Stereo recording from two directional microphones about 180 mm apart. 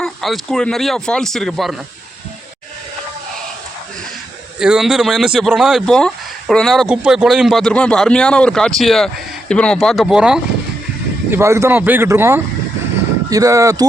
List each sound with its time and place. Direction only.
0.0 s speech: centre (ahead or behind)
4.6 s speech: 5° right (ahead or behind)
11.3 s speech: 15° right (ahead or behind)